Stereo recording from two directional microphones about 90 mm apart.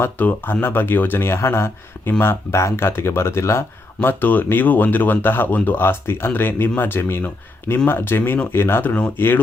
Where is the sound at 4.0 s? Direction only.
20° left (ahead or behind).